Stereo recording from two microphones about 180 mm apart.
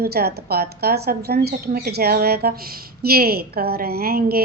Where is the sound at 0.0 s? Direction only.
60° right (ahead or behind).